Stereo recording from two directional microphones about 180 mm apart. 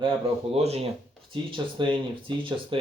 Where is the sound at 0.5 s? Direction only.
35° right (ahead or behind).